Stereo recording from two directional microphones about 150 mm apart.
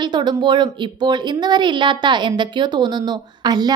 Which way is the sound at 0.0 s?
30° right (ahead or behind).